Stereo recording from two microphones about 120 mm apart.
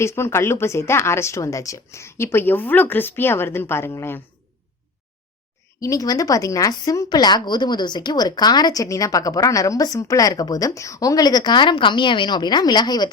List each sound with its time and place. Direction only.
0.0 s speech: 20° left (ahead or behind)
5.8 s speech: 30° left (ahead or behind)